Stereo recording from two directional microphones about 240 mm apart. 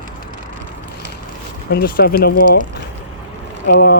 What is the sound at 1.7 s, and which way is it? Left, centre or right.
Speech, left.